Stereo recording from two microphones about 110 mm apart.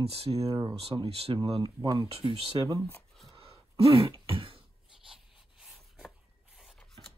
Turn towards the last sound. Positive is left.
turn(degrees=-5)  # may be behind; listen again after turning